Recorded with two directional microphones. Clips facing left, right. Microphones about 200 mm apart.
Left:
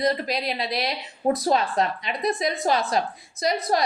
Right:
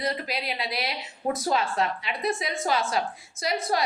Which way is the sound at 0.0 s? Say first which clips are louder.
Left 6 dB; 40° left (ahead or behind).